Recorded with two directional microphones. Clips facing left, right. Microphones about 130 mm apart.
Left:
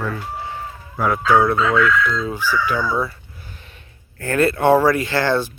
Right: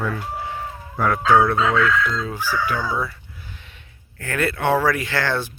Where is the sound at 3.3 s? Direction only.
45° left (ahead or behind).